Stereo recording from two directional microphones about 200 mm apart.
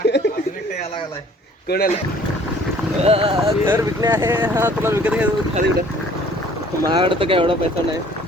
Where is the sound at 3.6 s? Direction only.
15° right (ahead or behind).